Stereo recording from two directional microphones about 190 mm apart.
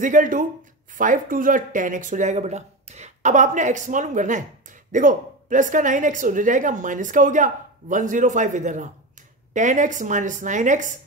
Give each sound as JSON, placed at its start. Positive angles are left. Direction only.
{"t": 0.0, "sound": "a woman's voice", "side_deg": -45}